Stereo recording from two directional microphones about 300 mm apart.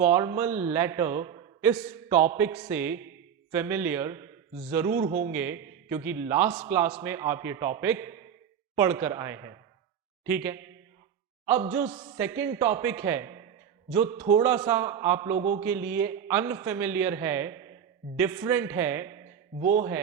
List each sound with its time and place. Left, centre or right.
0.0 s a man's voice: centre
19.5 s a man's voice: right